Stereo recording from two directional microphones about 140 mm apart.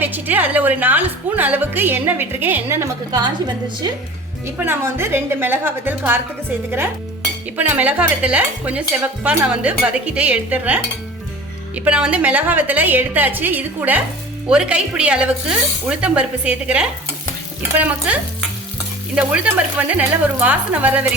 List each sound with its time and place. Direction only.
0.0 s a woman's voice: 15° right (ahead or behind)
4.5 s a woman's voice: 15° right (ahead or behind)